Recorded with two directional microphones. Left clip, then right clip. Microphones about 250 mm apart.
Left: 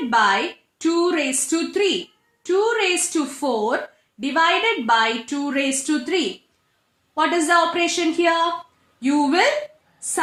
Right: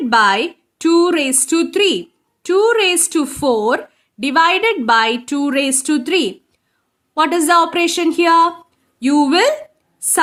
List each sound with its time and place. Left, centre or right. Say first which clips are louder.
0.1 s a woman's voice: right 5 dB; right